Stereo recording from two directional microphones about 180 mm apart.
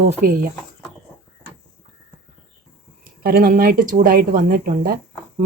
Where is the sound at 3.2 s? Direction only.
55° right (ahead or behind).